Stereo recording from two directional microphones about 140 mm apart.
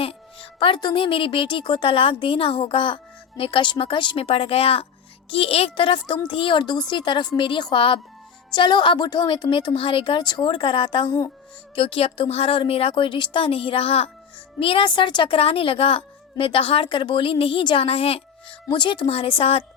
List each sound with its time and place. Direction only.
0.0 s a woman's voice: 40° left (ahead or behind)